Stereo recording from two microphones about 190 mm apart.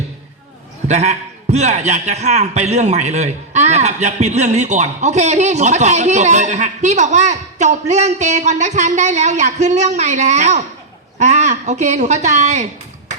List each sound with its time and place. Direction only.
0.9 s a man's voice: 35° right (ahead or behind)